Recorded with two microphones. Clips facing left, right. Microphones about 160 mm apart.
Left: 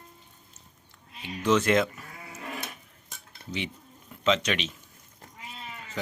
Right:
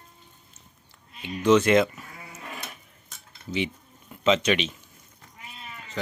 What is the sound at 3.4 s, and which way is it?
Cutlery, 35° left (ahead or behind).